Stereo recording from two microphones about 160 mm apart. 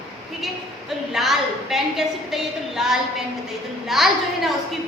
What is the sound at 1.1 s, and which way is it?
A woman's voice, centre (ahead or behind).